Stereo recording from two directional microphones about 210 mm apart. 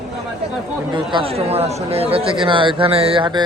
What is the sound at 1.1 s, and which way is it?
Speech, 30° right (ahead or behind).